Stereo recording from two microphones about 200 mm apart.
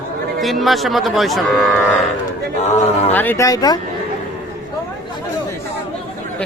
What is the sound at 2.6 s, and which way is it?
Speech, 35° left (ahead or behind).